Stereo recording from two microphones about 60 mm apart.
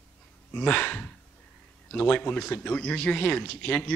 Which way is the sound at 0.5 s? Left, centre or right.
Left.